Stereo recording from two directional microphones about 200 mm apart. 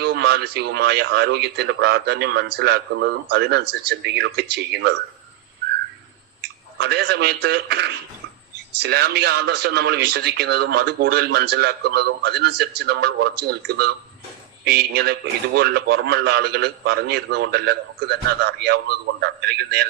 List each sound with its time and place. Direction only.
0.0 s speech: 55° right (ahead or behind)
6.7 s a man's voice: 55° right (ahead or behind)